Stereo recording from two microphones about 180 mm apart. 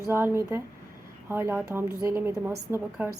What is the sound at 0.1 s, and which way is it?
Speech, 15° right (ahead or behind).